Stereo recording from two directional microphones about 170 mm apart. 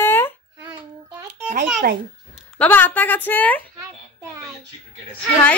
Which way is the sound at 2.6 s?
10° left (ahead or behind).